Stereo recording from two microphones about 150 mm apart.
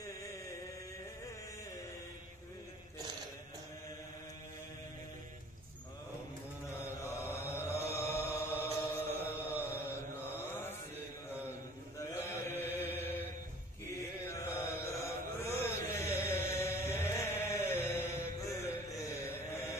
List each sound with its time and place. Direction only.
6.7 s chant: 15° left (ahead or behind)
9.3 s chant: 10° right (ahead or behind)
9.8 s mantra: 15° left (ahead or behind)
12.0 s mantra: 15° left (ahead or behind)
14.2 s chant: 15° left (ahead or behind)